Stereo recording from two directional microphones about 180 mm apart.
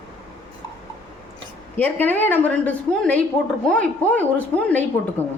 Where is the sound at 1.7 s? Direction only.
10° left (ahead or behind).